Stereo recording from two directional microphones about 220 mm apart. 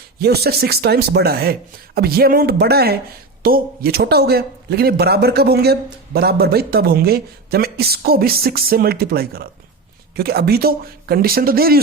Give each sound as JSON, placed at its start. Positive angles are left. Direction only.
{"t": 0.2, "sound": "speech", "side_deg": -45}